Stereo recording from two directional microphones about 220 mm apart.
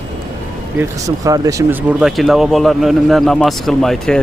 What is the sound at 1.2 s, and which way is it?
Speech, 15° right (ahead or behind).